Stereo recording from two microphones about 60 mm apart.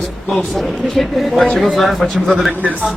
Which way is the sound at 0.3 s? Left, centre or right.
Centre.